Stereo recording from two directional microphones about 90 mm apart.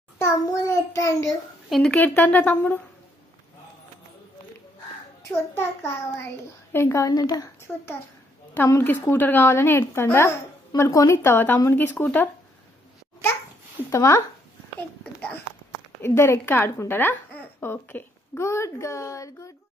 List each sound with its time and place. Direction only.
0.2 s child singing: 35° left (ahead or behind)
1.7 s a woman's voice: 10° left (ahead or behind)
2.0 s a woman's voice: 20° left (ahead or behind)
5.3 s a child's voice: 25° left (ahead or behind); by 7.5 s 40° left (ahead or behind)
7.6 s a woman's voice: 30° left (ahead or behind)
13.8 s a child's voice: 35° left (ahead or behind)
16.0 s a woman's voice: 30° left (ahead or behind)
18.5 s a child's voice: 30° left (ahead or behind)